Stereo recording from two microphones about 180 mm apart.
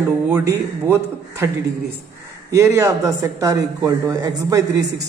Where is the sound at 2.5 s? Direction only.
15° right (ahead or behind).